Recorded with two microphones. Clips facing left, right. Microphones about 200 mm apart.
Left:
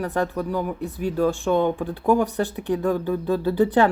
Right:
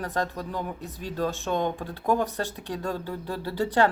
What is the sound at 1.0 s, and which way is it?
Speech, 15° left (ahead or behind).